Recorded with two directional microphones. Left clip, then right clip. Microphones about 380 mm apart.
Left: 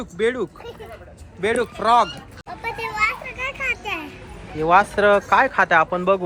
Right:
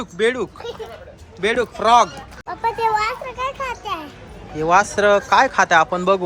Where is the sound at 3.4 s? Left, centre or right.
Right.